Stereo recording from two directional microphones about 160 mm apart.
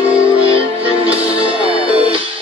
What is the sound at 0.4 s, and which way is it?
Music, 35° right (ahead or behind).